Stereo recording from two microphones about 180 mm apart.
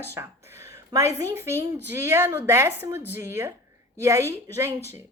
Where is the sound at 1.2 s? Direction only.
15° right (ahead or behind).